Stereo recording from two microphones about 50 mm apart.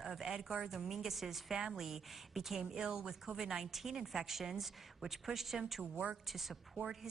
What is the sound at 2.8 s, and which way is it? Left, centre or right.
Speech, centre.